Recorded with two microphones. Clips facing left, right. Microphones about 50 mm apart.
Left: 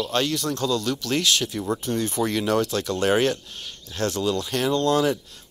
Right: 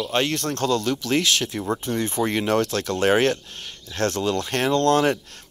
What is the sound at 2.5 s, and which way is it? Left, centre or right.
Speech, right.